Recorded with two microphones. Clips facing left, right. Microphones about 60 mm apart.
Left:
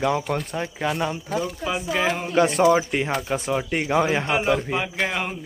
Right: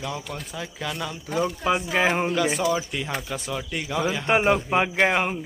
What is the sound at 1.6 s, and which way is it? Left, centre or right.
Speech, centre.